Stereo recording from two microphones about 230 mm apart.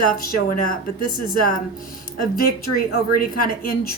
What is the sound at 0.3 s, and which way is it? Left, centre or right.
Speech, left.